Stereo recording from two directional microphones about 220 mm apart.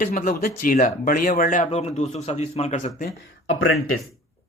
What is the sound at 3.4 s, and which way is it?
Speech, 65° left (ahead or behind).